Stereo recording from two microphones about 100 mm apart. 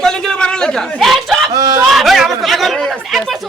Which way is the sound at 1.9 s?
Centre (ahead or behind).